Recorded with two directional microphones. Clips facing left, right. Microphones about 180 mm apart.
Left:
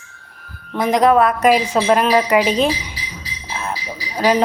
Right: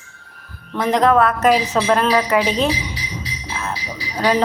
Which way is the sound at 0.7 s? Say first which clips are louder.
Left 2 dB; 10° left (ahead or behind).